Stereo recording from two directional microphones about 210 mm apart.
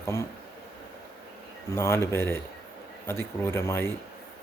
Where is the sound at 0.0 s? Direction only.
15° left (ahead or behind).